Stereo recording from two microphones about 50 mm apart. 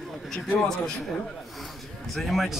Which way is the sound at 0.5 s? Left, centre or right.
Centre.